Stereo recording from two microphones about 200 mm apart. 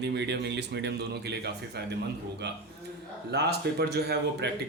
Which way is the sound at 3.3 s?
55° right (ahead or behind).